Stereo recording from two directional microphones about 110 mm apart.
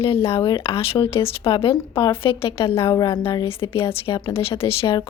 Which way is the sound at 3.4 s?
55° left (ahead or behind).